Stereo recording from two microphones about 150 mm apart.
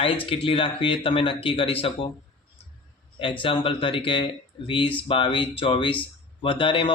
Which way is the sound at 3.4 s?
35° left (ahead or behind).